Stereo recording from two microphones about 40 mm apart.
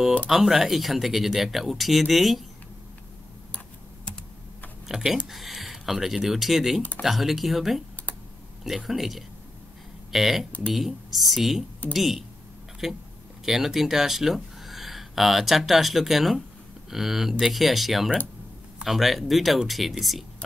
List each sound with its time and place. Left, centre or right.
0.3 s speech: centre
4.8 s speech: centre